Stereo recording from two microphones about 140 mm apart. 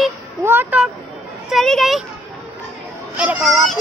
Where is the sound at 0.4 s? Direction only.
15° right (ahead or behind).